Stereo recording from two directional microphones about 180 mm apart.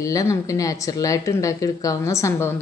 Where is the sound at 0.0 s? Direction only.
20° left (ahead or behind).